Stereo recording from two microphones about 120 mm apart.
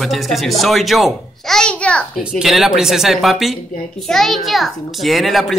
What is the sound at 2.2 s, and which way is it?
A child's voice, 5° right (ahead or behind).